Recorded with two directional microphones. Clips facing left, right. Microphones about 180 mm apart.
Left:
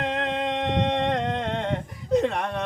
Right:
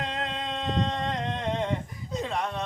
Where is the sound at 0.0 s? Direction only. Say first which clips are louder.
Left 6 dB; 65° left (ahead or behind).